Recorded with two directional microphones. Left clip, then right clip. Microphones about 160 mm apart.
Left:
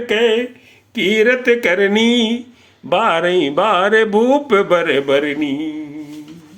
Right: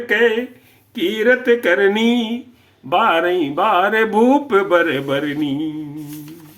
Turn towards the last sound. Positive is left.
turn(degrees=20)  # may be behind; listen again after turning